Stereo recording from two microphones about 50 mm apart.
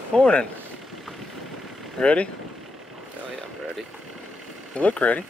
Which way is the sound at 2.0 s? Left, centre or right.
Left.